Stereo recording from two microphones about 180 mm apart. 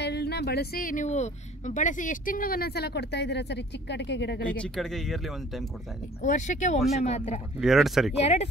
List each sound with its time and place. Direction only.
0.0 s speech: 65° left (ahead or behind)
4.5 s speech: 5° left (ahead or behind)
6.2 s speech: 40° left (ahead or behind)
7.6 s speech: centre (ahead or behind)
8.2 s speech: 35° left (ahead or behind)